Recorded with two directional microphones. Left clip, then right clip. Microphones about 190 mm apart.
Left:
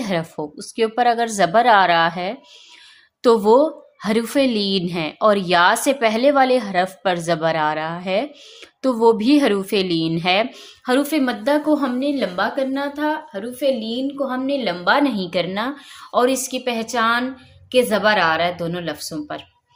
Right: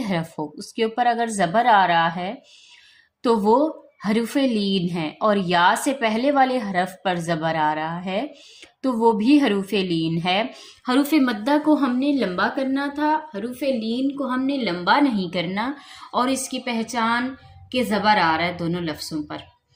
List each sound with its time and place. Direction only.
0.0 s a woman's voice: 10° left (ahead or behind)